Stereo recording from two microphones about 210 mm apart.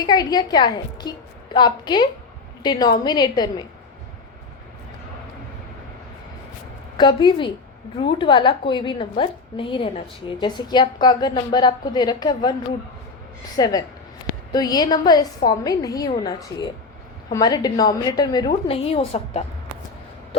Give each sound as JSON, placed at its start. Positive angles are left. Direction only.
{"t": 0.0, "sound": "a woman's voice", "side_deg": 20}
{"t": 6.9, "sound": "a woman's voice", "side_deg": 20}
{"t": 13.6, "sound": "a woman's voice", "side_deg": 15}